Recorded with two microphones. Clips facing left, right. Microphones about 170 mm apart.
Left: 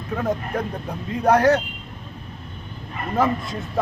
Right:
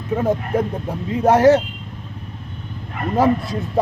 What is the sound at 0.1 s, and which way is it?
A man's voice, 25° right (ahead or behind).